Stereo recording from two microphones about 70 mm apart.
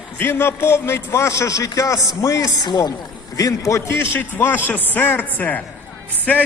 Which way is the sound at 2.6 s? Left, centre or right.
Left.